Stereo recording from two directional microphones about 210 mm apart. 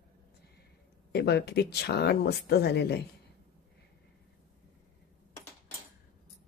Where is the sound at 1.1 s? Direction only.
50° left (ahead or behind).